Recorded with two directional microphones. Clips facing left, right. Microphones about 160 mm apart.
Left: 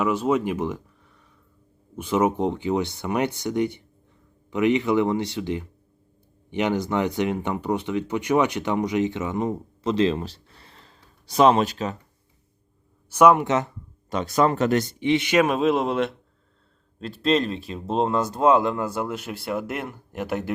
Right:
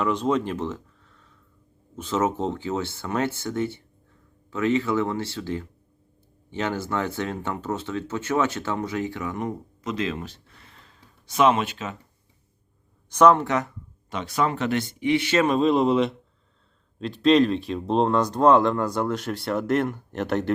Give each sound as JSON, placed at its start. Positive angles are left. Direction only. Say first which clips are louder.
{"t": 0.0, "sound": "speech", "louder": "left 1 dB", "side_deg": 10}
{"t": 13.1, "sound": "speech", "louder": "left 1 dB", "side_deg": 10}
{"t": 14.1, "sound": "speech", "louder": "left 4 dB", "side_deg": 40}
{"t": 15.0, "sound": "speech", "louder": "even", "side_deg": 20}